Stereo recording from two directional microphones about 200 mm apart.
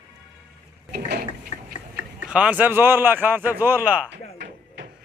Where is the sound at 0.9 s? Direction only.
50° right (ahead or behind).